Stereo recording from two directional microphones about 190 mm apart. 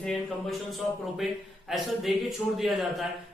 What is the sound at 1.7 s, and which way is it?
A man's voice, centre (ahead or behind).